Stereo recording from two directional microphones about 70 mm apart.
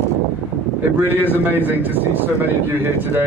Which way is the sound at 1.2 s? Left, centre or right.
Left.